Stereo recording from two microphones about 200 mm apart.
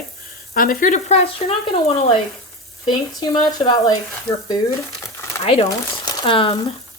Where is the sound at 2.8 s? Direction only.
20° left (ahead or behind).